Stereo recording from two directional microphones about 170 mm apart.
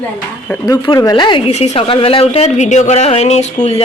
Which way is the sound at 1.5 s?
35° left (ahead or behind).